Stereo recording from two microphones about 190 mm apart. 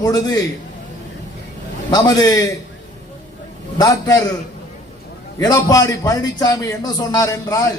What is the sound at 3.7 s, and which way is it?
Speech, 20° left (ahead or behind).